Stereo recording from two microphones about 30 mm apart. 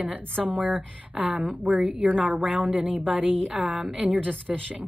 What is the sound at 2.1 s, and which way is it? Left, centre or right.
A woman's voice, right.